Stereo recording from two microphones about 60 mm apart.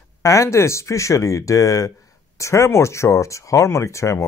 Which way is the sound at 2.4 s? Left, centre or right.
Left.